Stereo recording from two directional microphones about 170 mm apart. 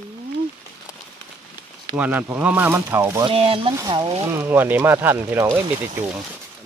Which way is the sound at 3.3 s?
30° right (ahead or behind).